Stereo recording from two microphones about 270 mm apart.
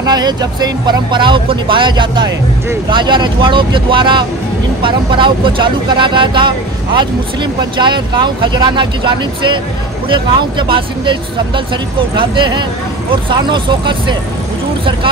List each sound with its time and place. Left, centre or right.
0.0 s speech: centre
7.7 s speech: centre
10.7 s speech: centre